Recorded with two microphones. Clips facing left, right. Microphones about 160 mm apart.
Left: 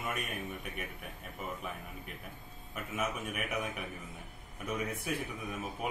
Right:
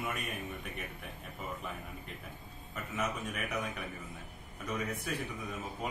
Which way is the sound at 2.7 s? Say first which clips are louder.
Even; 10° left (ahead or behind).